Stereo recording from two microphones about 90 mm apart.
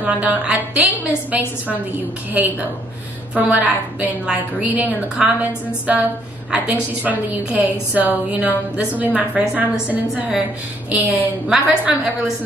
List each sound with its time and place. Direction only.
0.0 s a woman's voice: 15° right (ahead or behind)